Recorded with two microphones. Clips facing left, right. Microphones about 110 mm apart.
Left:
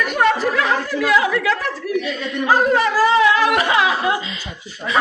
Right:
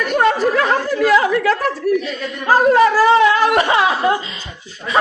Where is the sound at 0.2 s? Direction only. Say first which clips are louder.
Right 2 dB; 35° right (ahead or behind).